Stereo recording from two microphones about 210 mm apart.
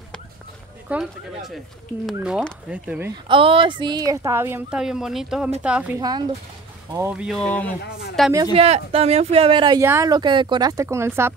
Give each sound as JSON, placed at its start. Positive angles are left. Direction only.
{"t": 0.8, "sound": "speech", "side_deg": 0}
{"t": 3.3, "sound": "speech", "side_deg": -25}
{"t": 5.9, "sound": "speech", "side_deg": -20}
{"t": 7.1, "sound": "speech", "side_deg": -5}
{"t": 7.4, "sound": "speech", "side_deg": 5}
{"t": 8.5, "sound": "speech", "side_deg": -30}